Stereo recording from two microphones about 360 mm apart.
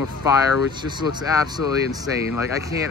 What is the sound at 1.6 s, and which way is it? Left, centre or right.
Speech, left.